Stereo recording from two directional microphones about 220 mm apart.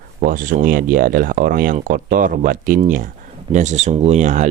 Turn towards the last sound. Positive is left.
turn(degrees=-35)  # may be behind; listen again after turning